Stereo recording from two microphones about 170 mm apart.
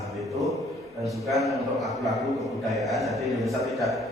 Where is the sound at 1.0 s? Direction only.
Centre (ahead or behind).